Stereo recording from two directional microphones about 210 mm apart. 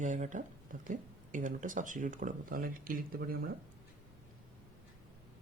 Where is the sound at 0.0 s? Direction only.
35° right (ahead or behind).